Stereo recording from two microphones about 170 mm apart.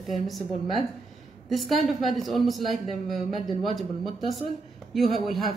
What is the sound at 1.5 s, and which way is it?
A woman's voice, centre (ahead or behind).